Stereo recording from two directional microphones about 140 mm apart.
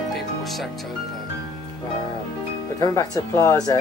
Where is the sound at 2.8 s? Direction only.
25° left (ahead or behind).